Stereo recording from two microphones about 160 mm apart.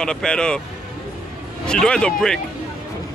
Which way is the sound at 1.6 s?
5° left (ahead or behind).